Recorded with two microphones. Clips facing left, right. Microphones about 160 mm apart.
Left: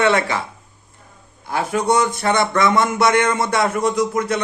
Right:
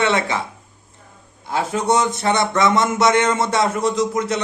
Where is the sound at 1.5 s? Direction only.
25° right (ahead or behind).